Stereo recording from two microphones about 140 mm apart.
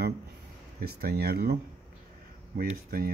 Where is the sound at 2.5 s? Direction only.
90° right.